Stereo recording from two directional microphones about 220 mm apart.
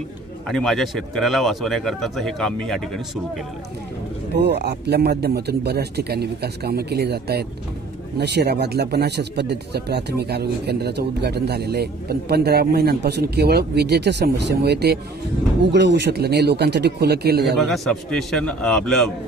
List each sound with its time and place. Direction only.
0.5 s speech: centre (ahead or behind)
4.3 s speech: 50° right (ahead or behind)
17.6 s speech: centre (ahead or behind)